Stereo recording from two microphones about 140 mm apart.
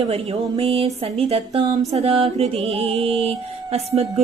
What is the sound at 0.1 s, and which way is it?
Music, 45° right (ahead or behind).